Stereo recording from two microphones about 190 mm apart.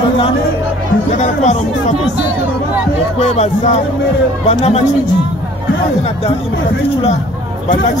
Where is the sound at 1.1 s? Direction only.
40° left (ahead or behind).